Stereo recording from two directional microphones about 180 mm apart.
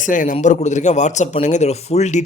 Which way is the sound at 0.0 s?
45° left (ahead or behind).